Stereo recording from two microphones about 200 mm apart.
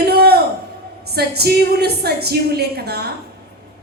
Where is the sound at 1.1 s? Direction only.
50° right (ahead or behind).